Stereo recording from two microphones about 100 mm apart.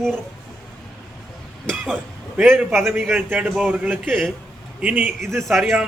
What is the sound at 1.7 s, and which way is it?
Speech, 5° left (ahead or behind).